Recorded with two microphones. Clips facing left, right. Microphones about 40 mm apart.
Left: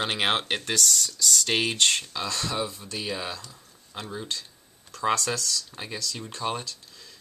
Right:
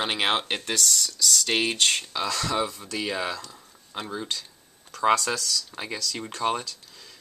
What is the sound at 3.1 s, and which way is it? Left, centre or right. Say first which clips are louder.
Speech: right 3 dB; right.